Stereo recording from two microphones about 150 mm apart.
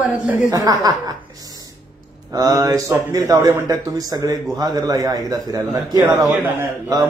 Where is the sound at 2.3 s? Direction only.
25° right (ahead or behind).